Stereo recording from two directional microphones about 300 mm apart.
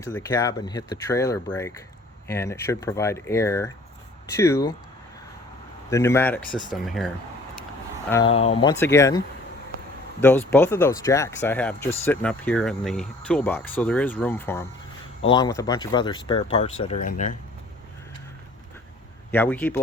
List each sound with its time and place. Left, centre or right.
0.0 s speech: centre
5.9 s speech: centre
8.1 s speech: centre
19.3 s speech: centre